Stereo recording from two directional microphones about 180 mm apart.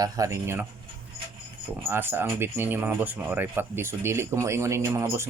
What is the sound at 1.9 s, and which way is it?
Speech, 10° right (ahead or behind).